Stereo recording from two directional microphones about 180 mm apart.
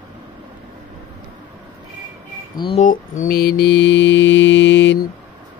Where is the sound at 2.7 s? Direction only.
45° left (ahead or behind); by 5.1 s 80° left.